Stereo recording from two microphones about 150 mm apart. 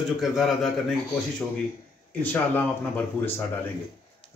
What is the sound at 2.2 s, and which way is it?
Speech, 15° left (ahead or behind).